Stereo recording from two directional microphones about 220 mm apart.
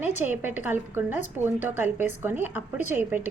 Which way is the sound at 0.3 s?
10° right (ahead or behind).